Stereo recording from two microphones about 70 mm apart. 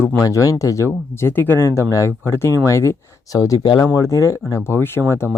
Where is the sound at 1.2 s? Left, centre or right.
Left.